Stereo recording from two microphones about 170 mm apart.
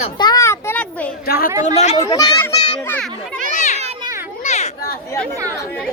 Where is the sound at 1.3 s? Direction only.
60° left (ahead or behind).